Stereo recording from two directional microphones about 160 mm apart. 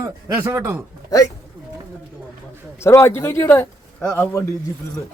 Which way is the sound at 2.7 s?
15° left (ahead or behind).